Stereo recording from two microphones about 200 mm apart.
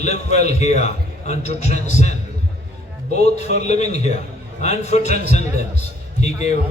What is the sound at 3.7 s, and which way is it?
A man's voice, 35° left (ahead or behind).